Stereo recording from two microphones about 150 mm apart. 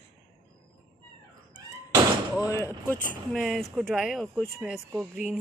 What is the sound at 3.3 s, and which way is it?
Speech, centre (ahead or behind).